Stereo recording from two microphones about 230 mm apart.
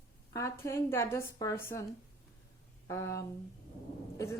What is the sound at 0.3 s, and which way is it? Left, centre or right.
Speech, centre.